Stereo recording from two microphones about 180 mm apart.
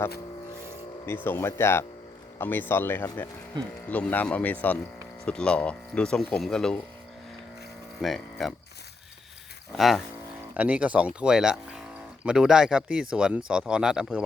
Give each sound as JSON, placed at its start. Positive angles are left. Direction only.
{"t": 1.0, "sound": "speech", "side_deg": 10}
{"t": 8.0, "sound": "speech", "side_deg": 0}
{"t": 9.7, "sound": "speech", "side_deg": 0}